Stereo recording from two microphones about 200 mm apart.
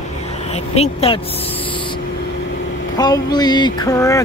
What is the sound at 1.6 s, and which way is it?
Owl, 25° left (ahead or behind).